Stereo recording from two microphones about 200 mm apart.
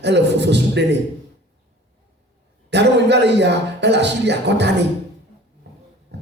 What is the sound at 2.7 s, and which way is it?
A man's voice, 60° right (ahead or behind).